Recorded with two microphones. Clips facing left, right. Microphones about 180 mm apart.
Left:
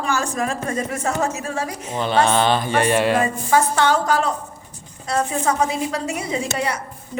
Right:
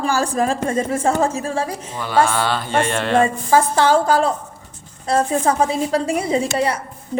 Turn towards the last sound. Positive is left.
turn(degrees=-35)  # may be behind; listen again after turning